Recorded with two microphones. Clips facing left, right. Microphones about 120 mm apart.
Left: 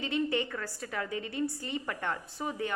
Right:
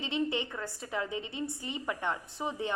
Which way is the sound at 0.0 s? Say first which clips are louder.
Left 2 dB; 20° right (ahead or behind).